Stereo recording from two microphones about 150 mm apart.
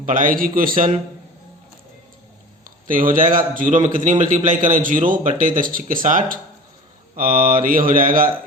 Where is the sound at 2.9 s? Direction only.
65° right (ahead or behind).